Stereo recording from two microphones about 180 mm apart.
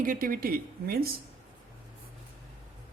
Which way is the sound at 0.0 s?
50° right (ahead or behind).